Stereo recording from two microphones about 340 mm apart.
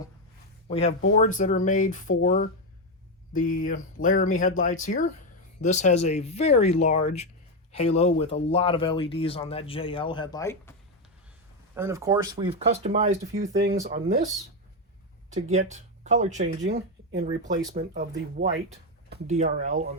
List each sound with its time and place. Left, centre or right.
0.7 s speech: centre
11.7 s speech: centre
13.5 s speech: right
15.7 s speech: right
19.1 s speech: right